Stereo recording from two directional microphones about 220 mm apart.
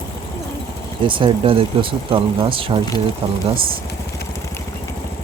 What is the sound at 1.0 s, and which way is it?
Speech, 20° right (ahead or behind).